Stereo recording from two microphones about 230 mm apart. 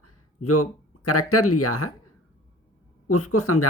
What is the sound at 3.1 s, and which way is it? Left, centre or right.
Speech, left.